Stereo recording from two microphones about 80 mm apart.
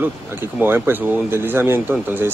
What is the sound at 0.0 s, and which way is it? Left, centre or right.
Speech, right.